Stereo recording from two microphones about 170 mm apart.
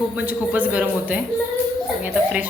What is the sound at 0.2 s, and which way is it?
A woman's voice, 10° right (ahead or behind).